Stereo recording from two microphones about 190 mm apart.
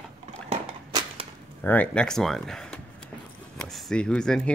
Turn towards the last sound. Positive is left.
turn(degrees=5)  # may be behind; listen again after turning